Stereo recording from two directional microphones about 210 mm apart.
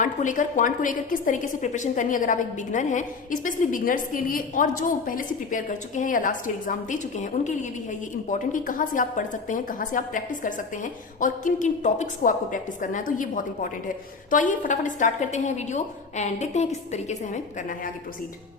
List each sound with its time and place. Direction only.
0.0 s a woman's voice: 35° left (ahead or behind)